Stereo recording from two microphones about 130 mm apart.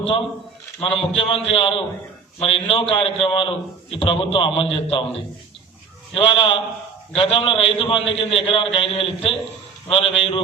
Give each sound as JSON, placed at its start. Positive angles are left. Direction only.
{"t": 0.9, "sound": "a man's voice", "side_deg": 45}